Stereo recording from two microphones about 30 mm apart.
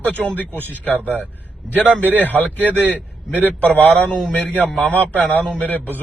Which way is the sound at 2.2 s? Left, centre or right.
Left.